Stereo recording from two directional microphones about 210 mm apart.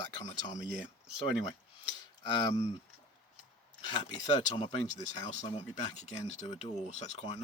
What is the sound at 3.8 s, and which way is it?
Speech, 20° left (ahead or behind).